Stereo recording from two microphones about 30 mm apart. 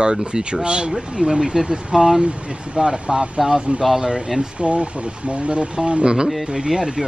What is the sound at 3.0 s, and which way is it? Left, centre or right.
Speech, right.